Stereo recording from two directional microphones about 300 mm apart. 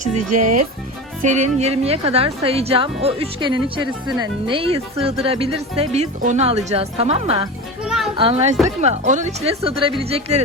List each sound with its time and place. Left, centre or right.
0.2 s speech: right
1.2 s a woman's voice: right
7.9 s children playing: centre
8.1 s a woman's voice: centre